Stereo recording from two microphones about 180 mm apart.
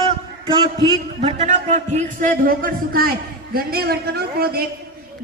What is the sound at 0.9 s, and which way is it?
A man's voice, 35° right (ahead or behind).